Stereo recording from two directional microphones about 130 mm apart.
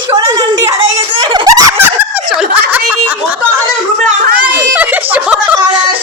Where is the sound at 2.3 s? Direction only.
10° right (ahead or behind).